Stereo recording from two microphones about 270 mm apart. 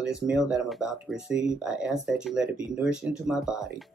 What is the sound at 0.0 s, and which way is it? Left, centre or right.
Speech, centre.